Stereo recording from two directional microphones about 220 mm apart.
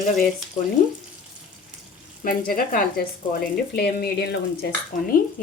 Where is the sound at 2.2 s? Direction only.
40° left (ahead or behind).